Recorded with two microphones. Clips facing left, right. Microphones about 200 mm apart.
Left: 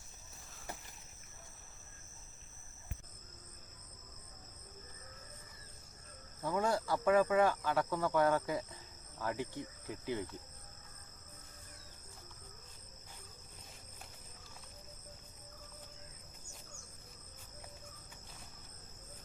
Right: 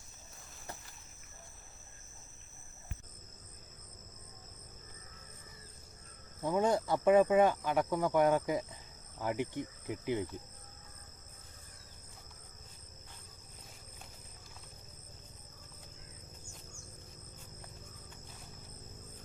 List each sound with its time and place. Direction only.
6.4 s speech: 20° right (ahead or behind)
9.1 s insect: 20° right (ahead or behind)